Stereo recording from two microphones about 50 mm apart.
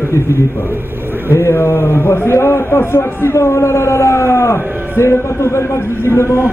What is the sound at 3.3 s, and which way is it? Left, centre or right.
Speech, left.